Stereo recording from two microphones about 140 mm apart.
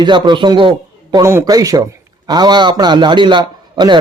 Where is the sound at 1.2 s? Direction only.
20° right (ahead or behind).